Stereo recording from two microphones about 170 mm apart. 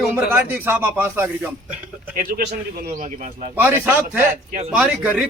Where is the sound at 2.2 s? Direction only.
60° right (ahead or behind).